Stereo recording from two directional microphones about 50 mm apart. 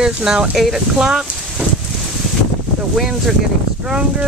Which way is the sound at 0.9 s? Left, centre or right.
Right.